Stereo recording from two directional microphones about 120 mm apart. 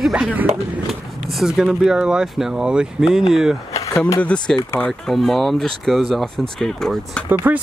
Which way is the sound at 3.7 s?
25° left (ahead or behind).